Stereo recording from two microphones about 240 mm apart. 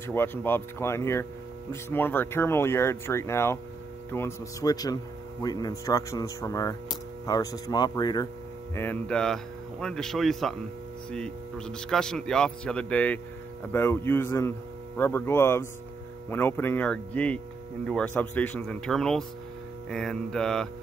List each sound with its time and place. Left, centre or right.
0.0 s speech: centre